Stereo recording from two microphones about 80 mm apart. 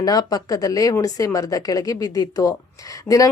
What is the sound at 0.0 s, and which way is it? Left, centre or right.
A woman's voice, left.